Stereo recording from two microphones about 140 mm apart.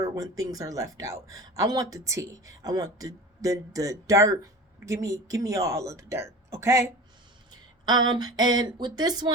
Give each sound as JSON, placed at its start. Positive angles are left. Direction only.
{"t": 0.0, "sound": "speech", "side_deg": -25}